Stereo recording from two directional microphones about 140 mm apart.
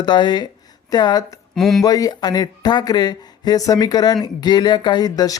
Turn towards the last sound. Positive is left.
turn(degrees=30)  # may be behind; listen again after turning